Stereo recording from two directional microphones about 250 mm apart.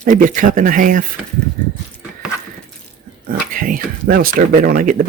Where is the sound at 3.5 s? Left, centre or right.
Right.